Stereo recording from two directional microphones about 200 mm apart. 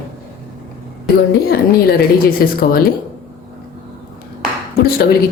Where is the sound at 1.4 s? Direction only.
50° left (ahead or behind).